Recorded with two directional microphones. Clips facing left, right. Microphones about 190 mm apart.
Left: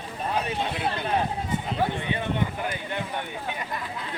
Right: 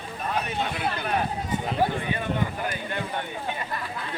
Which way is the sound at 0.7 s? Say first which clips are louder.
Left 1 dB; 25° left (ahead or behind).